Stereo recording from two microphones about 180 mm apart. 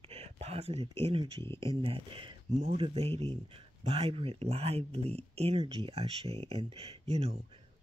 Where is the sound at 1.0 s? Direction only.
30° right (ahead or behind).